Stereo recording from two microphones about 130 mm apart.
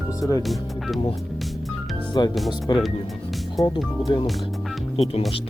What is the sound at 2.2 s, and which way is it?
Speech, 35° left (ahead or behind).